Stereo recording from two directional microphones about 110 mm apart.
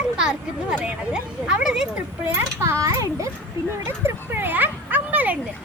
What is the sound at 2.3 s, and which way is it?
A child's voice, 25° right (ahead or behind).